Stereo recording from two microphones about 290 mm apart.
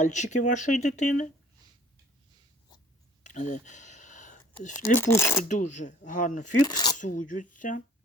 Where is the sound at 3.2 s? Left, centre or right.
Left.